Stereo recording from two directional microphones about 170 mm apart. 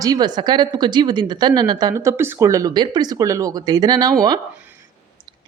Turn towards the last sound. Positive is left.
turn(degrees=-25)  # may be behind; listen again after turning